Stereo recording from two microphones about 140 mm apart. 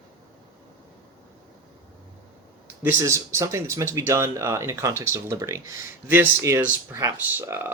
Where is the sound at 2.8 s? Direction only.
20° right (ahead or behind).